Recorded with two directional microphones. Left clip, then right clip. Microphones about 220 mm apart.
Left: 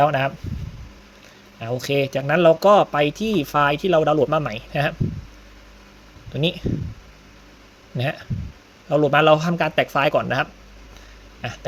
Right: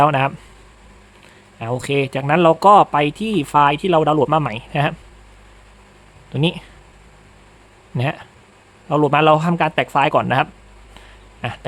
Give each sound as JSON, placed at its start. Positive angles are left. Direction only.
{"t": 0.0, "sound": "speech", "side_deg": -20}
{"t": 1.5, "sound": "speech", "side_deg": -15}
{"t": 6.3, "sound": "speech", "side_deg": -15}
{"t": 7.9, "sound": "speech", "side_deg": -15}